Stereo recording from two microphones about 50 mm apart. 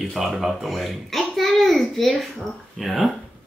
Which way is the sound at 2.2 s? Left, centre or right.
Centre.